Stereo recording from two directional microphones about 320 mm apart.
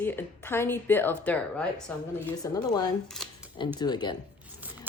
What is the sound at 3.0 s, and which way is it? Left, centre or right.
Speech, centre.